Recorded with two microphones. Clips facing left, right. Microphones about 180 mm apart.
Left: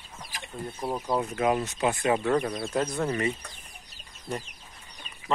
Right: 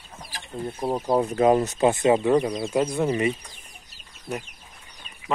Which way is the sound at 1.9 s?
20° right (ahead or behind).